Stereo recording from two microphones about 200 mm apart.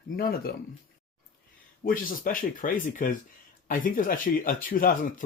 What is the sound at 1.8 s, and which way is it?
Speech, 45° left (ahead or behind).